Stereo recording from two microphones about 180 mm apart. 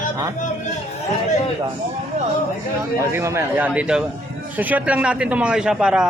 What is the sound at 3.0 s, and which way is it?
A man's voice, 15° right (ahead or behind).